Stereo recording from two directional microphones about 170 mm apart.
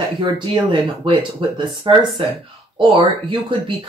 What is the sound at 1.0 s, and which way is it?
Speech, 30° right (ahead or behind).